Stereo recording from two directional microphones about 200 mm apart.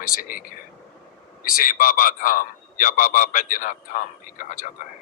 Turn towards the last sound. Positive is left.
turn(degrees=40)  # may be behind; listen again after turning